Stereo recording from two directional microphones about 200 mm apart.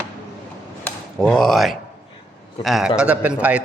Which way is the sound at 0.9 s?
Centre (ahead or behind).